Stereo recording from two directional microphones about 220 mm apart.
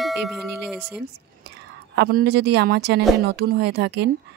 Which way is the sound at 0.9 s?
50° right (ahead or behind).